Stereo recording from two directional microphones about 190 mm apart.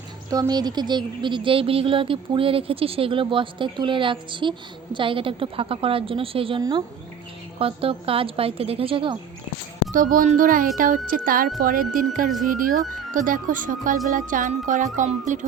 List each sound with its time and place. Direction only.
0.3 s speech: 20° right (ahead or behind)
9.9 s speech: 45° right (ahead or behind)